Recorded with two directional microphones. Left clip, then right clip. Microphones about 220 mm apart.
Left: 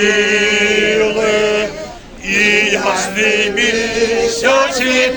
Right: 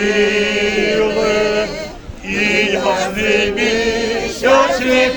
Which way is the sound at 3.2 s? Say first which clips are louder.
Left 2 dB; 30° left (ahead or behind).